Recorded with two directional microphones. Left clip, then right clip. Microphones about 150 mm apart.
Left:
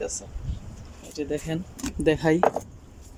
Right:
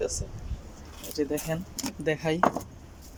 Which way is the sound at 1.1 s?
20° left (ahead or behind).